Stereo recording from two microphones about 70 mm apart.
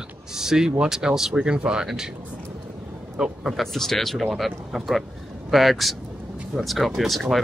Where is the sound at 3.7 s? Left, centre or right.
Centre.